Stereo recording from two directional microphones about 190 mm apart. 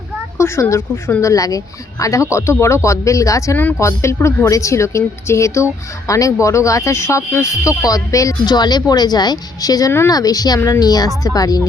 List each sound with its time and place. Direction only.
0.3 s speech: 15° left (ahead or behind)